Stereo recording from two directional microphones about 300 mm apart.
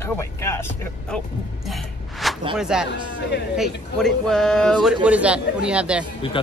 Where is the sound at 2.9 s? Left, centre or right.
Left.